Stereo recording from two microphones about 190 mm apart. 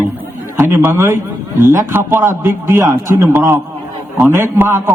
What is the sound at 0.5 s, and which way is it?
A man's voice, 10° right (ahead or behind).